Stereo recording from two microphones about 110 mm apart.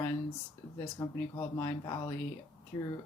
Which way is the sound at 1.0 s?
30° left (ahead or behind).